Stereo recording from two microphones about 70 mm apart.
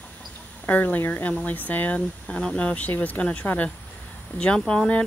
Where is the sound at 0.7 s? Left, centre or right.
Left.